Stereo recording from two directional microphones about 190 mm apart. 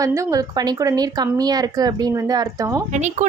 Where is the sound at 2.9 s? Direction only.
40° right (ahead or behind).